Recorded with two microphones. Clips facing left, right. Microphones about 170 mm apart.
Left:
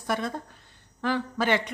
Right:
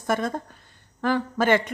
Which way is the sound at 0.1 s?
45° right (ahead or behind).